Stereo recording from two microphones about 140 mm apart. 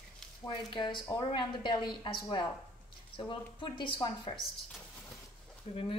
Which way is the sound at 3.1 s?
35° left (ahead or behind).